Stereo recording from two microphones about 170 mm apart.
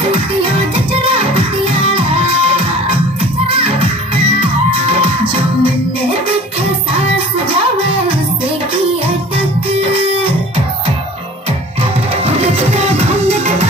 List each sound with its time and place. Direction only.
3.4 s music: 35° right (ahead or behind)
4.8 s music: 30° right (ahead or behind)
12.3 s music: 35° right (ahead or behind)